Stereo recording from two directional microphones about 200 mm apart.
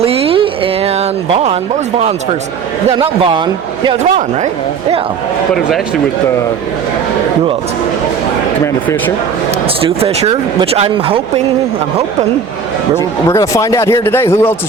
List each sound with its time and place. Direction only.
0.0 s a sound: 30° right (ahead or behind)
2.9 s speech: 25° right (ahead or behind)
8.6 s speech: 15° left (ahead or behind)
9.8 s speech: 30° right (ahead or behind)
13.0 s speech: 15° left (ahead or behind)